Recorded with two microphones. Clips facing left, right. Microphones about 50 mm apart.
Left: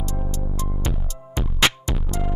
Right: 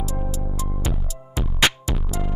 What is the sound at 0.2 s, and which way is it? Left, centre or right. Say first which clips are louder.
Music: even; centre.